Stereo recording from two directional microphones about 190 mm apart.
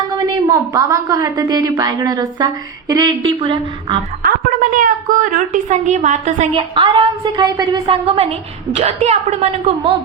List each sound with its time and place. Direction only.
0.2 s a woman's voice: 15° right (ahead or behind)
4.2 s a woman's voice: 45° right (ahead or behind); by 9.9 s 30° right (ahead or behind)